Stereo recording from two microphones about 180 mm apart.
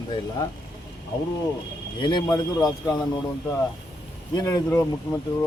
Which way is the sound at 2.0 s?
25° left (ahead or behind).